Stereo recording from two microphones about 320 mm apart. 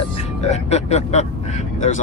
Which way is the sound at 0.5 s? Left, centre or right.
Left.